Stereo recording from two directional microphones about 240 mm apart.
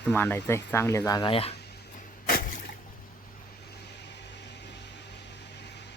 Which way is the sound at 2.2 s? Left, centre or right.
Left.